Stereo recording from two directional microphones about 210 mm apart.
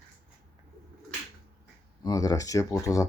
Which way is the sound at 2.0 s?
15° left (ahead or behind).